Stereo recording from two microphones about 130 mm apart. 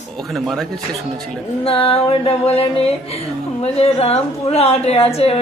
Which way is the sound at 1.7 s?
45° left (ahead or behind).